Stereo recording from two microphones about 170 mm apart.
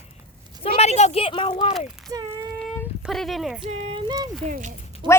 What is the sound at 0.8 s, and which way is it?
Speech, 40° left (ahead or behind).